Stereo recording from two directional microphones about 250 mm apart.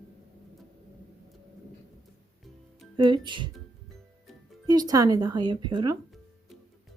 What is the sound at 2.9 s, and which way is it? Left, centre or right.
Speech, centre.